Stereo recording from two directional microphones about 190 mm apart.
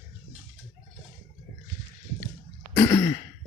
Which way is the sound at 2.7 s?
20° left (ahead or behind).